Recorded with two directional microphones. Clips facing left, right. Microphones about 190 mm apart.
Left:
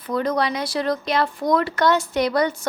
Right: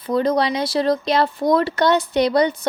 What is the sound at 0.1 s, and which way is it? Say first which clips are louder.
A woman's voice: right 4 dB; 30° right (ahead or behind).